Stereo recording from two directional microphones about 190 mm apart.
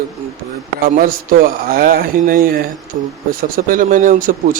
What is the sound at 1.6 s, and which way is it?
Speech, 50° right (ahead or behind).